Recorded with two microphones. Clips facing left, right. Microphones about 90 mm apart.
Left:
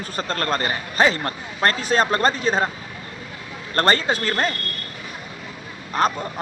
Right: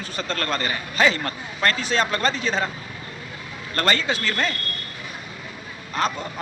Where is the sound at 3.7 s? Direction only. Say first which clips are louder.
Left 4 dB; 40° left (ahead or behind).